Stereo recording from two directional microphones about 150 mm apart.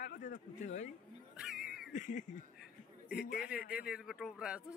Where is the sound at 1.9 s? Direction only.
55° left (ahead or behind).